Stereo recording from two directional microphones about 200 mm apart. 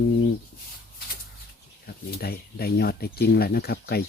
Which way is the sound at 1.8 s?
50° left (ahead or behind).